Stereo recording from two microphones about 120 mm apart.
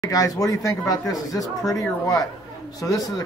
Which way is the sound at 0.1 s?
30° left (ahead or behind).